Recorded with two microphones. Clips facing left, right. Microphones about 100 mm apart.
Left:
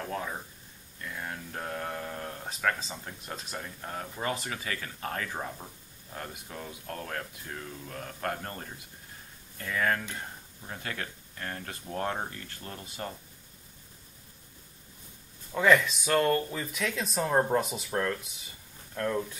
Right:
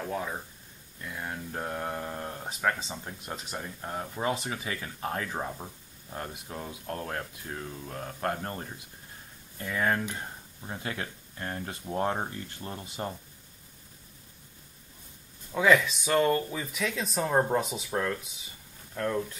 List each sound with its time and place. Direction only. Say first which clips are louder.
0.0 s speech: right 2 dB; 5° right (ahead or behind)
15.5 s speech: even; centre (ahead or behind)